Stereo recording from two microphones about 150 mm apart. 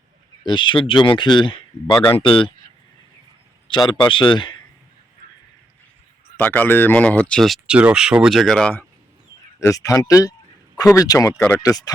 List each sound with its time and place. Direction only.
0.4 s speech: 35° left (ahead or behind)
3.7 s a man's voice: 30° left (ahead or behind)
6.3 s speech: 10° left (ahead or behind)
9.6 s speech: 20° left (ahead or behind)